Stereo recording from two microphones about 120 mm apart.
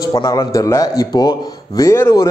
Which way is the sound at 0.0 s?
30° left (ahead or behind).